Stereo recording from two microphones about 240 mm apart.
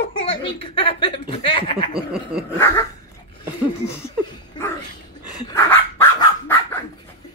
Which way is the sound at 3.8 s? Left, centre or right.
Centre.